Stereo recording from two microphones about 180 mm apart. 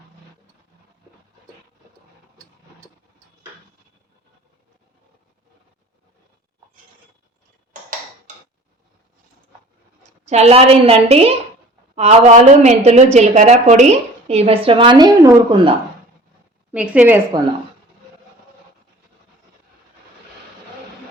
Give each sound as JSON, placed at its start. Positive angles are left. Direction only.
{"t": 10.2, "sound": "a woman's voice", "side_deg": -35}
{"t": 16.7, "sound": "a woman's voice", "side_deg": -5}